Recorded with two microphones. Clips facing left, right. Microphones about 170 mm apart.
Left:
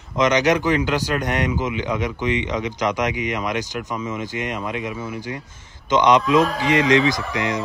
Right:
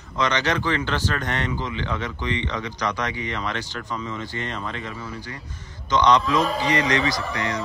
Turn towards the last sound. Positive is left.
turn(degrees=20)  # may be behind; listen again after turning